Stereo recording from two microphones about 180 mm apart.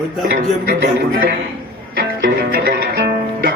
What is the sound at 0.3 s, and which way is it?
Speech, 55° right (ahead or behind).